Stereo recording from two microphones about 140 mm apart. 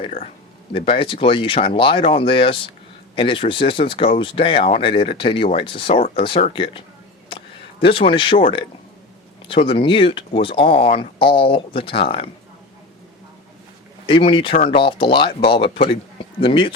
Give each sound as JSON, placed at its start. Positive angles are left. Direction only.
{"t": 0.7, "sound": "speech", "side_deg": 40}
{"t": 7.3, "sound": "a sound", "side_deg": 40}
{"t": 9.5, "sound": "speech", "side_deg": 40}
{"t": 14.1, "sound": "speech", "side_deg": 40}